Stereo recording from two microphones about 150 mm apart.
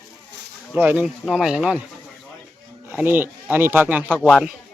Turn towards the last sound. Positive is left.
turn(degrees=-5)  # may be behind; listen again after turning